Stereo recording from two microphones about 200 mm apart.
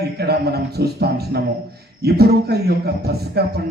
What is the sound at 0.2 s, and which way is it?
A man's voice, 55° right (ahead or behind).